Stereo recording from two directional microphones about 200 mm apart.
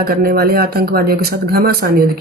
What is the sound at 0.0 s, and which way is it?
Speech, 50° right (ahead or behind).